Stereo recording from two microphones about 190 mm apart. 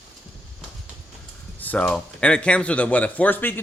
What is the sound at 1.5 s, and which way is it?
Speech, 10° left (ahead or behind).